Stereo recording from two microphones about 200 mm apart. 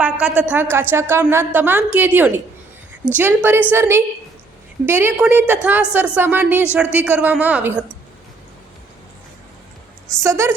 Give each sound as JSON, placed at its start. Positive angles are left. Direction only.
{"t": 0.0, "sound": "a woman's voice", "side_deg": -5}
{"t": 10.2, "sound": "a woman's voice", "side_deg": -15}